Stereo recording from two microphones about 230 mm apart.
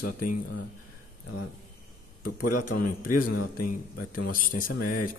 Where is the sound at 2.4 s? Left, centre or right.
Left.